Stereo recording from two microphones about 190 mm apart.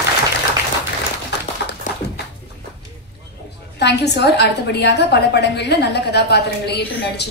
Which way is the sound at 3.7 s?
60° left (ahead or behind).